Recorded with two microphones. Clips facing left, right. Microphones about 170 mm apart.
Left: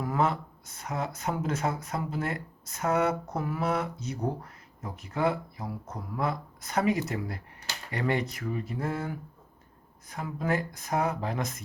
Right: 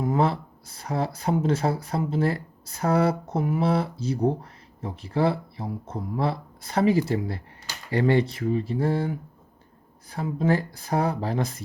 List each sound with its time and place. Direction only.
0.0 s speech: 30° right (ahead or behind)